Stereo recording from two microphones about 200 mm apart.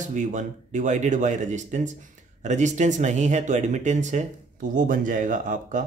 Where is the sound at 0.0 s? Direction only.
40° right (ahead or behind).